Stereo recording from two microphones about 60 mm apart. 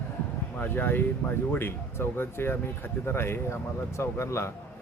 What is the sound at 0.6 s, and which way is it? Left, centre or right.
Speech, left.